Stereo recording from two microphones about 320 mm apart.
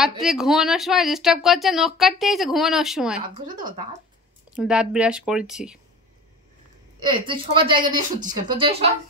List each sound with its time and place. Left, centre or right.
0.2 s speech: centre
4.5 s speech: centre
7.0 s a woman's voice: centre